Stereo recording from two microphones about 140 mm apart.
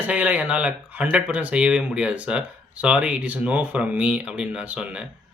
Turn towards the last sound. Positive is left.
turn(degrees=-10)  # may be behind; listen again after turning